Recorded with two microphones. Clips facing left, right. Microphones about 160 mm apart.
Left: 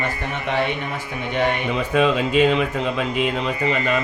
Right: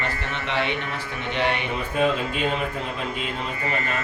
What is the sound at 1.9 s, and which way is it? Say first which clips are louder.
Speech: left 6 dB; 90° left.